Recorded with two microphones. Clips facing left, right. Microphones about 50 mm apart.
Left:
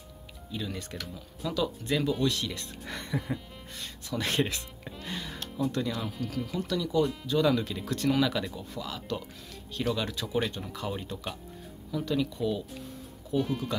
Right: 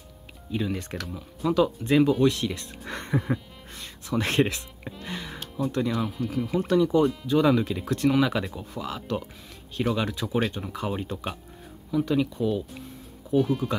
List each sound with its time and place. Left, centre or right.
0.5 s speech: right
5.0 s music: centre
5.7 s speech: centre
6.5 s speech: right
7.2 s speech: centre
13.4 s speech: centre